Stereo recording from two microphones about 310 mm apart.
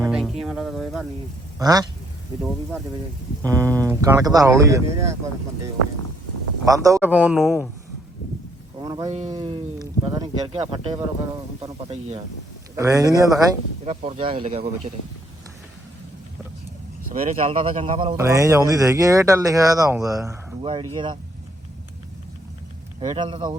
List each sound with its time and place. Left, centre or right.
0.0 s music: centre
1.5 s speech: centre
3.4 s speech: centre
6.7 s a man's voice: centre
8.8 s speech: centre
12.7 s speech: centre
17.2 s speech: right
23.0 s speech: centre